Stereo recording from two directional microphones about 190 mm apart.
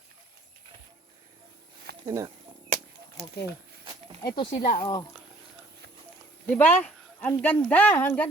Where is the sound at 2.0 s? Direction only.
15° right (ahead or behind).